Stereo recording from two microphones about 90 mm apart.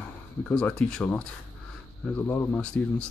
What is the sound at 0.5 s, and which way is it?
Speech, 10° left (ahead or behind).